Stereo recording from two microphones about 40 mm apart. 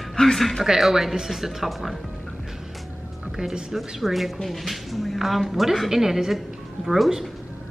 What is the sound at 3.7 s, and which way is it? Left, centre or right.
Speech, centre.